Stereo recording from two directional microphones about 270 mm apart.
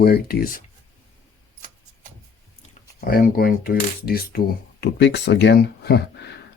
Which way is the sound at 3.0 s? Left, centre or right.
Left.